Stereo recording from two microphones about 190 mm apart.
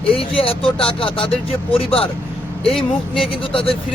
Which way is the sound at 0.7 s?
30° left (ahead or behind).